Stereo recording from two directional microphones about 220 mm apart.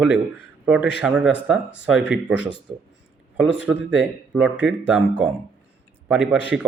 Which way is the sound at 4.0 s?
5° right (ahead or behind).